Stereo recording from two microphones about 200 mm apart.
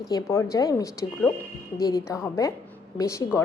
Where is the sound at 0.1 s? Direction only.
15° left (ahead or behind).